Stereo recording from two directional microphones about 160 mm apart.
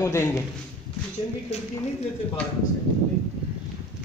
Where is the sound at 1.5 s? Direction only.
45° left (ahead or behind).